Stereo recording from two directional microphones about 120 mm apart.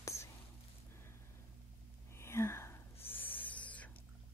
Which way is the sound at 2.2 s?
20° left (ahead or behind).